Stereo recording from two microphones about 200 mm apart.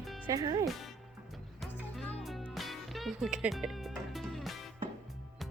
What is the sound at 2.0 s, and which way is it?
Music, 5° left (ahead or behind).